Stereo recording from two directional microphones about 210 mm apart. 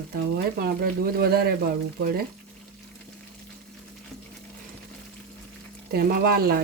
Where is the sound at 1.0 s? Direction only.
50° right (ahead or behind).